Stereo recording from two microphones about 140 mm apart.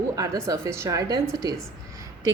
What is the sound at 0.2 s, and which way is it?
A woman's voice, 25° right (ahead or behind).